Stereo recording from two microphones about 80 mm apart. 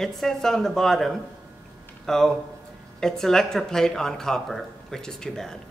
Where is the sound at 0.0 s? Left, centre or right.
Centre.